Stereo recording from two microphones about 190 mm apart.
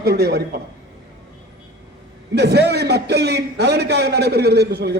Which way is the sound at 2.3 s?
60° right (ahead or behind).